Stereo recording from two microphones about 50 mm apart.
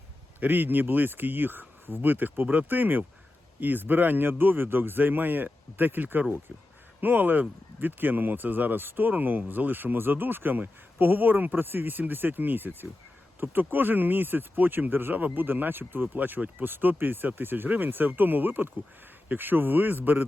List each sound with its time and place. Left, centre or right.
0.3 s speech: right